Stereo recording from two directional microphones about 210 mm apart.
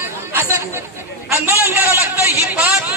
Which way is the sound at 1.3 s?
10° right (ahead or behind).